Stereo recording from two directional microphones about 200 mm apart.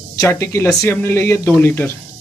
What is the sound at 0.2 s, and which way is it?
Speech, 10° left (ahead or behind).